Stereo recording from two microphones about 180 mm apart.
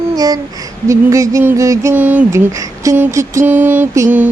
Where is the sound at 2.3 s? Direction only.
15° right (ahead or behind).